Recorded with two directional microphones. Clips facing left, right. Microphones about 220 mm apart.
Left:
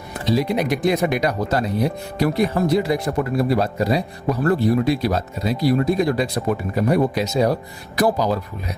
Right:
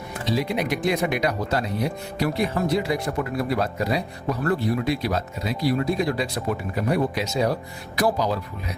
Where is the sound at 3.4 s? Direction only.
35° left (ahead or behind).